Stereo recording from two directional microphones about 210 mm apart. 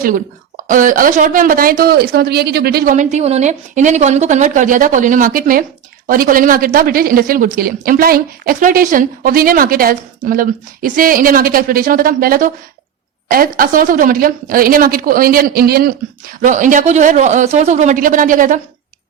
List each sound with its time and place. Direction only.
0.0 s a woman's voice: 40° right (ahead or behind)